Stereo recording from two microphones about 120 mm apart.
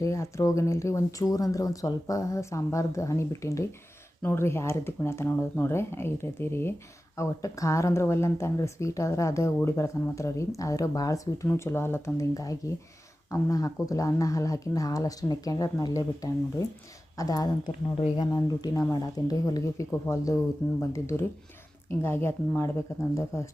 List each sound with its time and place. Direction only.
0.0 s speech: 25° left (ahead or behind)